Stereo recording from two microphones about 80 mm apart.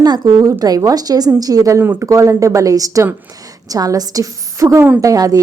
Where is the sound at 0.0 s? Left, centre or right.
Right.